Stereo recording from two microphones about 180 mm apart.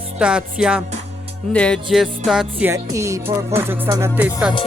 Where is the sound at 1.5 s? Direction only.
5° left (ahead or behind).